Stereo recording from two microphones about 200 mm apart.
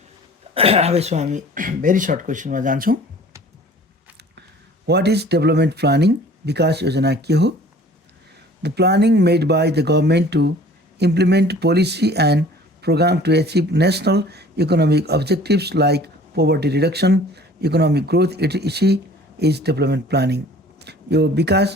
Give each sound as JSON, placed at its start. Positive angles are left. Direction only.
{"t": 0.5, "sound": "speech", "side_deg": -30}
{"t": 4.9, "sound": "speech", "side_deg": -55}
{"t": 8.6, "sound": "speech", "side_deg": -55}